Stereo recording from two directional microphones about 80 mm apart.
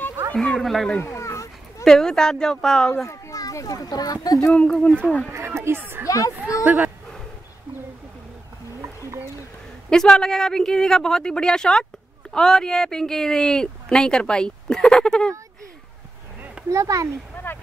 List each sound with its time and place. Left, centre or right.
0.4 s speech: centre
1.0 s a sound: left
1.9 s speech: centre
3.1 s speech: left
4.6 s speech: centre
5.3 s speech: right
6.0 s speech: left
6.6 s speech: centre
9.8 s speech: centre
16.7 s speech: right